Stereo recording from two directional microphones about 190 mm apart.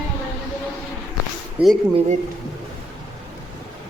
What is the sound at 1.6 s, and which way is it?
Speech, 10° right (ahead or behind).